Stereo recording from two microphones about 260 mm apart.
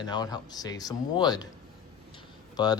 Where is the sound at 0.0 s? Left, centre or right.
Centre.